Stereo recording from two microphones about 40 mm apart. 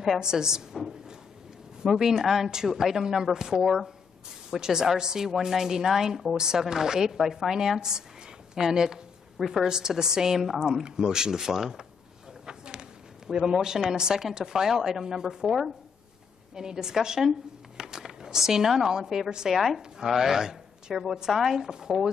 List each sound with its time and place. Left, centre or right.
0.2 s a woman's voice: centre
1.9 s a woman's voice: centre
10.7 s a woman's voice: centre
12.4 s a sound: right
13.3 s a woman's voice: centre
16.5 s speech: centre
19.5 s a woman's voice: centre